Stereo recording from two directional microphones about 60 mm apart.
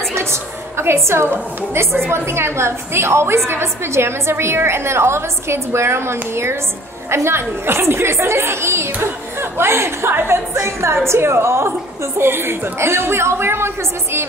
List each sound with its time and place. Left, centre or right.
0.1 s a woman's voice: right